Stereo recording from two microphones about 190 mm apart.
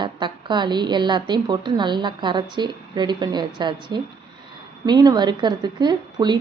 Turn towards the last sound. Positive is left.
turn(degrees=-20)  # may be behind; listen again after turning